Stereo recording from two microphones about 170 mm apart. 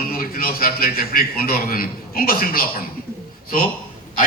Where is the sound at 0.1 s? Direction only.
60° left (ahead or behind).